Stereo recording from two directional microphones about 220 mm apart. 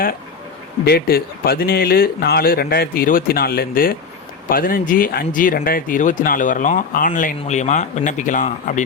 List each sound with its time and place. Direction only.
0.9 s speech: 45° left (ahead or behind)